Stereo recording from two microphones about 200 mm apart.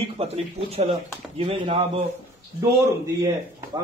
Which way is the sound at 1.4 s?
25° right (ahead or behind).